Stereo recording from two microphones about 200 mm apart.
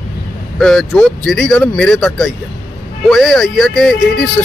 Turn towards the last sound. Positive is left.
turn(degrees=5)  # may be behind; listen again after turning